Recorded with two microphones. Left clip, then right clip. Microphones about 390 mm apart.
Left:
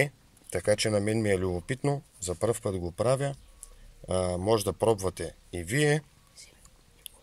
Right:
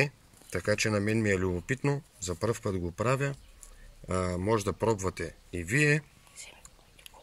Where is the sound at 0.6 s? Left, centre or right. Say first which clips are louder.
Left 3 dB; centre.